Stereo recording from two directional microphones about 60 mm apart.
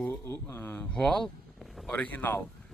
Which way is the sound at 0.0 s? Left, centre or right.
Left.